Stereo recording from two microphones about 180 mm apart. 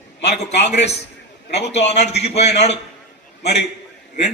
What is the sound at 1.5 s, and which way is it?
Speech, 70° left (ahead or behind).